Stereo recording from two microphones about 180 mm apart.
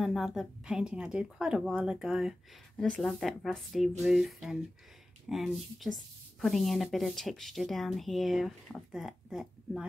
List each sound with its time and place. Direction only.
0.0 s speech: centre (ahead or behind)